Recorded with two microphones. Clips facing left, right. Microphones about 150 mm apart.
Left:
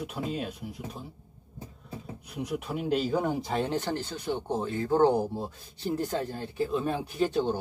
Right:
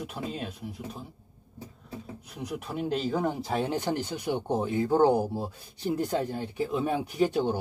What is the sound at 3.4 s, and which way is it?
Speech, 10° right (ahead or behind).